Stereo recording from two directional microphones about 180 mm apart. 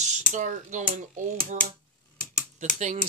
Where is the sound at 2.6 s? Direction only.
40° right (ahead or behind).